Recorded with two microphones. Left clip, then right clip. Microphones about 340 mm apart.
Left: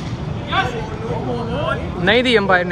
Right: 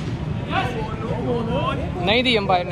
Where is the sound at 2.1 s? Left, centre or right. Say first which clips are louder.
Left 4 dB; left.